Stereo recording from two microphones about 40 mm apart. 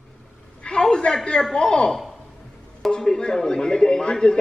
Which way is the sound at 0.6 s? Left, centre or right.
Centre.